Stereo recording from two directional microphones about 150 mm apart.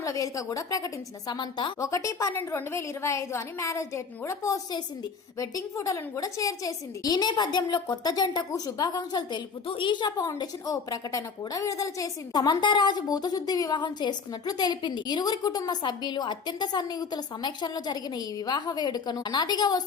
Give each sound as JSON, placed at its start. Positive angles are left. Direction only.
{"t": 0.0, "sound": "a woman's voice", "side_deg": 20}
{"t": 1.9, "sound": "a woman's voice", "side_deg": 20}